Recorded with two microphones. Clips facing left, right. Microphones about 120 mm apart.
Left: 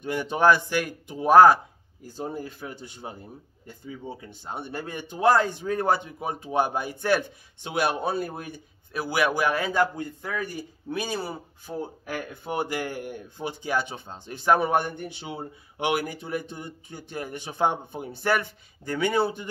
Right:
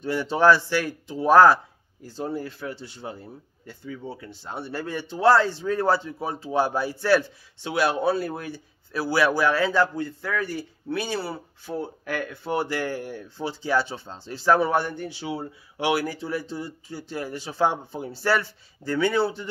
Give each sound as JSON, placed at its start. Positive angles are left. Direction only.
{"t": 0.0, "sound": "speech", "side_deg": 15}